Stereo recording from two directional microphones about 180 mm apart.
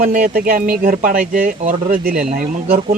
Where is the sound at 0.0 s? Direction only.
50° right (ahead or behind).